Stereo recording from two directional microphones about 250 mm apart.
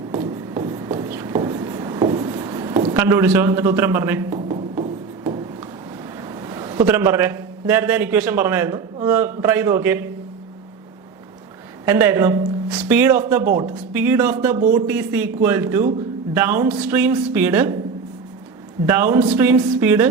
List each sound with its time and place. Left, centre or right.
0.1 s writing: centre
4.3 s music: right
4.8 s a sound: centre
6.2 s a man's voice: centre
11.9 s speech: centre
18.9 s speech: centre